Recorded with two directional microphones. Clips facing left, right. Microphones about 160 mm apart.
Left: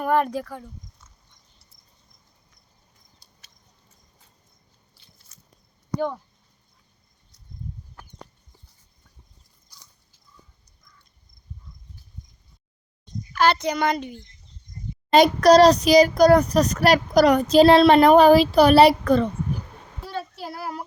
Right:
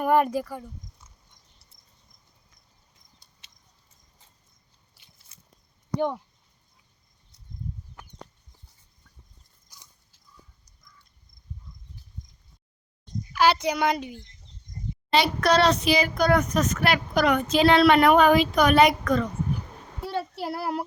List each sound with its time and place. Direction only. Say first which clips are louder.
0.0 s a child's voice: right 1 dB; 10° right (ahead or behind)
13.3 s a child's voice: left 1 dB; 10° right (ahead or behind)
15.1 s a child's voice: left 8 dB; 40° left (ahead or behind)